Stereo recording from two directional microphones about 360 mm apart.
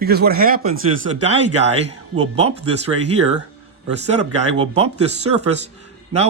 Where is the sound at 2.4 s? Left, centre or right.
Centre.